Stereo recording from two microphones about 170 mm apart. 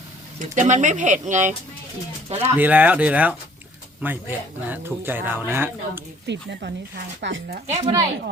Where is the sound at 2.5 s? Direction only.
10° right (ahead or behind).